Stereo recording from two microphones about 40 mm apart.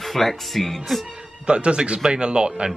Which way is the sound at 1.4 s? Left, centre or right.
Right.